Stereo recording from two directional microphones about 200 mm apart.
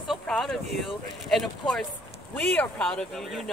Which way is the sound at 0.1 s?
Centre (ahead or behind).